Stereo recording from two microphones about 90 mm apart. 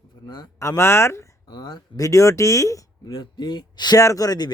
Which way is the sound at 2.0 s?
35° left (ahead or behind).